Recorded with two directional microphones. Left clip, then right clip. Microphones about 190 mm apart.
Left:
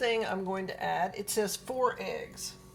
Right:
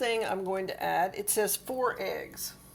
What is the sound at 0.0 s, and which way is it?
Speech, 30° right (ahead or behind).